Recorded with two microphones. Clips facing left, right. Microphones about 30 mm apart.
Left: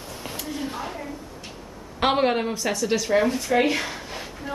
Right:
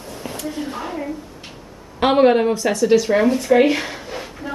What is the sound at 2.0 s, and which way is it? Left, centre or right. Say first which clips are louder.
Speech: right 7 dB; centre.